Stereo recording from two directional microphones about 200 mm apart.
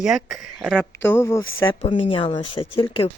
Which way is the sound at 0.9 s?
10° left (ahead or behind).